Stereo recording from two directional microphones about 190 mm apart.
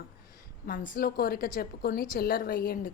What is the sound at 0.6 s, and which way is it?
A woman's voice, 45° left (ahead or behind).